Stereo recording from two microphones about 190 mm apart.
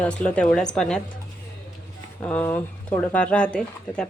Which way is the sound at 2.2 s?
10° left (ahead or behind).